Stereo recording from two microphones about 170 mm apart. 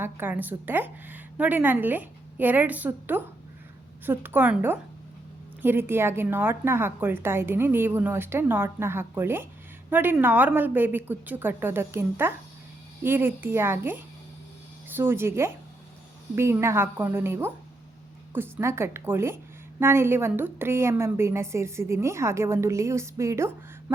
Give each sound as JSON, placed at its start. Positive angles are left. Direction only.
{"t": 0.0, "sound": "a woman's voice", "side_deg": -10}